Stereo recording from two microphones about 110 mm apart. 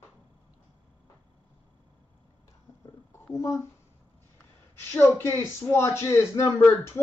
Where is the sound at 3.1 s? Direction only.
25° left (ahead or behind).